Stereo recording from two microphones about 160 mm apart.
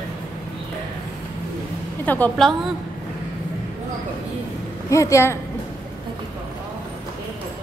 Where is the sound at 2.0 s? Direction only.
10° left (ahead or behind).